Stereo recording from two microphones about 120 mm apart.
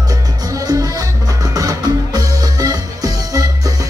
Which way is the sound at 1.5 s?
30° right (ahead or behind).